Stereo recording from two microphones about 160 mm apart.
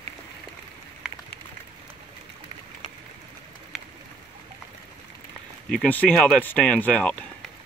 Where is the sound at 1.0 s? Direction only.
5° right (ahead or behind).